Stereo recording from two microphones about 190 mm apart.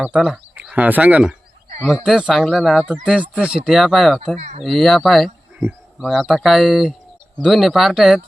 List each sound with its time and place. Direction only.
0.0 s speech: 5° right (ahead or behind)
4.4 s speech: 35° right (ahead or behind)
4.6 s speech: centre (ahead or behind)